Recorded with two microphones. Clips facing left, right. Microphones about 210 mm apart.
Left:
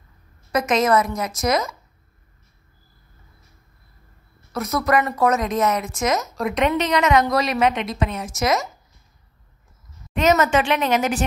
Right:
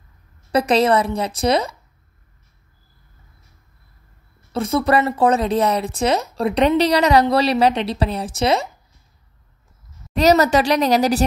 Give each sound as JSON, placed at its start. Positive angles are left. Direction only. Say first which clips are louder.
{"t": 0.5, "sound": "speech", "louder": "right 3 dB", "side_deg": -30}
{"t": 4.5, "sound": "speech", "louder": "right 3 dB", "side_deg": -30}
{"t": 10.1, "sound": "speech", "louder": "right 3 dB", "side_deg": -35}